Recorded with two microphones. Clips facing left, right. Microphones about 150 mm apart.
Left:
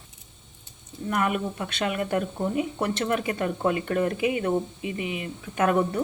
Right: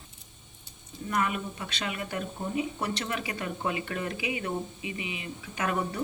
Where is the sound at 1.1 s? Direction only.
55° left (ahead or behind).